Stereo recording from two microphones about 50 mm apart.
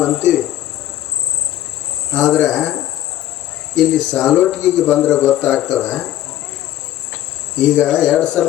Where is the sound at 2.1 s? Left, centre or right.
Centre.